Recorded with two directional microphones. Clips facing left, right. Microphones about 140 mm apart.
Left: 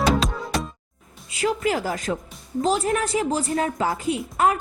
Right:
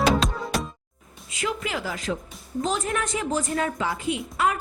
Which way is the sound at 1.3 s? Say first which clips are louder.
Left 6 dB; 35° left (ahead or behind).